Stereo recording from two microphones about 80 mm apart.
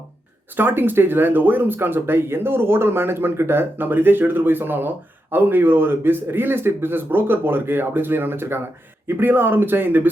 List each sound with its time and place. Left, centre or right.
0.5 s speech: right